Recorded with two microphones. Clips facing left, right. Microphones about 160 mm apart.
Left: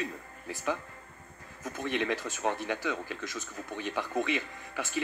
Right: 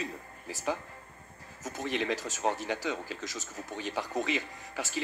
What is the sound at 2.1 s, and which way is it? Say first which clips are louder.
Speech: even; 40° right (ahead or behind).